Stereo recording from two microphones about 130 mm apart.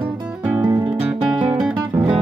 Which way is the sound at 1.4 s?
10° right (ahead or behind).